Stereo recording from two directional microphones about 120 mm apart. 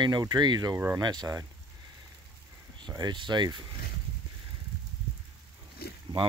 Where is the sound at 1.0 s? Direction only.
35° right (ahead or behind).